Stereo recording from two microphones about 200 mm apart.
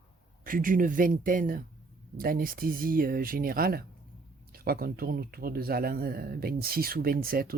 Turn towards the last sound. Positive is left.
turn(degrees=-50)  # may be behind; listen again after turning